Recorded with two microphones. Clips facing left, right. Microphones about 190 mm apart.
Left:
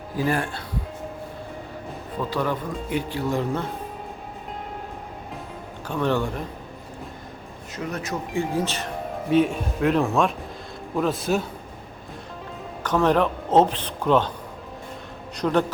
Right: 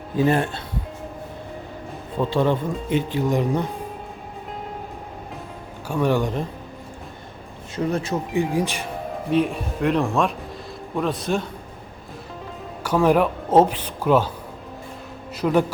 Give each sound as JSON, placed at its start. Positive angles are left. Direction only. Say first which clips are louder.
{"t": 0.2, "sound": "speech", "louder": "right 5 dB", "side_deg": -25}
{"t": 2.3, "sound": "speech", "louder": "right 5 dB", "side_deg": -25}
{"t": 5.9, "sound": "speech", "louder": "right 3 dB", "side_deg": -10}
{"t": 7.9, "sound": "speech", "louder": "right 6 dB", "side_deg": -30}
{"t": 8.4, "sound": "speech", "louder": "right 2 dB", "side_deg": -15}
{"t": 9.3, "sound": "a man's voice", "louder": "left 1 dB", "side_deg": 0}
{"t": 12.8, "sound": "speech", "louder": "right 2 dB", "side_deg": -10}
{"t": 15.4, "sound": "speech", "louder": "right 2 dB", "side_deg": -5}